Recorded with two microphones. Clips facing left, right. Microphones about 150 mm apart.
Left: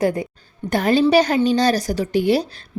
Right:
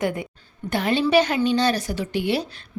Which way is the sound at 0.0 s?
35° left (ahead or behind).